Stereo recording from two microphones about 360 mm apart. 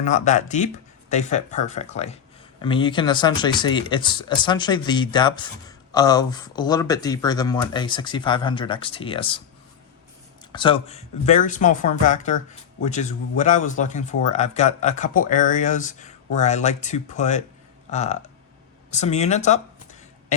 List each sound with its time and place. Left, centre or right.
0.0 s a man's voice: centre
10.5 s a man's voice: centre